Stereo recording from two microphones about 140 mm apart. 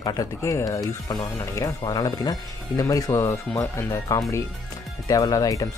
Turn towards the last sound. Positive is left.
turn(degrees=25)  # may be behind; listen again after turning